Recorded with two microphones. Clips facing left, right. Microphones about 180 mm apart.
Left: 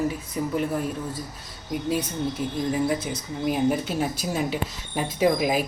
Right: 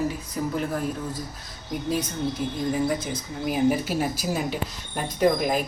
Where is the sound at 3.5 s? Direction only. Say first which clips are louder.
Right 1 dB; 5° right (ahead or behind).